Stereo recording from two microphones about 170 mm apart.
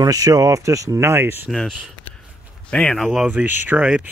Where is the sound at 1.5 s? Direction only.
5° left (ahead or behind).